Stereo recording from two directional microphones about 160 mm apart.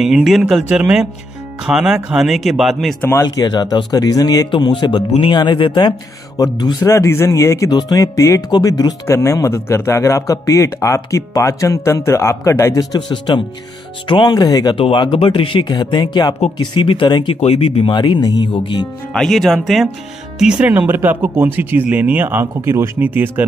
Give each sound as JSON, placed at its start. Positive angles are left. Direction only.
{"t": 0.0, "sound": "speech", "side_deg": 0}
{"t": 3.3, "sound": "speech", "side_deg": 25}
{"t": 19.1, "sound": "speech", "side_deg": 0}